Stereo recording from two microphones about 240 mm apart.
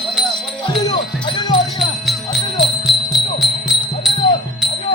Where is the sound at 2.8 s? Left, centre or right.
Centre.